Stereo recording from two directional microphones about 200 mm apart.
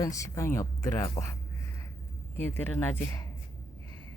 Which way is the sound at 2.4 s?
10° left (ahead or behind).